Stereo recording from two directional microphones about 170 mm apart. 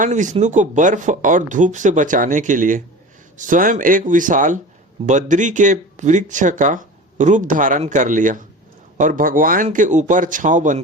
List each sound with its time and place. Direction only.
0.0 s speech: 50° right (ahead or behind)